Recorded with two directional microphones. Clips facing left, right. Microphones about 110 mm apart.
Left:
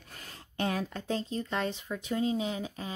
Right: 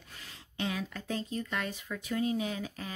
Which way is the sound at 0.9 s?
30° left (ahead or behind).